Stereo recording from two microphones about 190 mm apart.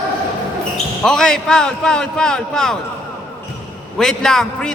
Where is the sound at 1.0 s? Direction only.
5° left (ahead or behind).